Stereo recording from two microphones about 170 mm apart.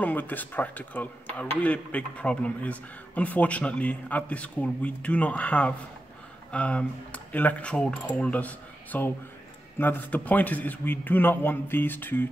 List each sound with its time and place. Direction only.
0.0 s speech: 10° left (ahead or behind)